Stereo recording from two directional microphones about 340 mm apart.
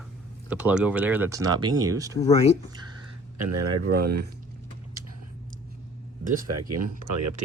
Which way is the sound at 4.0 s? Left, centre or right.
Right.